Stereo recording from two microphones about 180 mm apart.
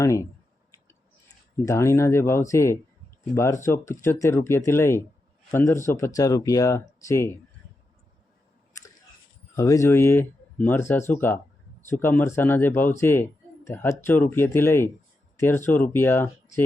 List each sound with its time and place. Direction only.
0.0 s speech: 15° left (ahead or behind)
1.6 s speech: 15° left (ahead or behind)
9.6 s speech: 15° left (ahead or behind)